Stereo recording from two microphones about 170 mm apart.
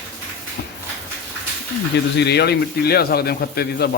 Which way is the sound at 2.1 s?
80° left.